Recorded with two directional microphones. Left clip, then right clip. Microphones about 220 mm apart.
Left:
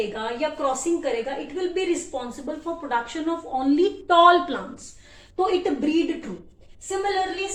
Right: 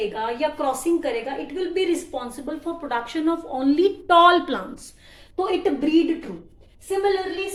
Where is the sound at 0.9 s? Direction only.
45° right (ahead or behind).